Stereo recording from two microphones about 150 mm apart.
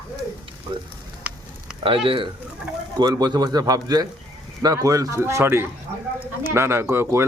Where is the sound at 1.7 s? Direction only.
5° right (ahead or behind).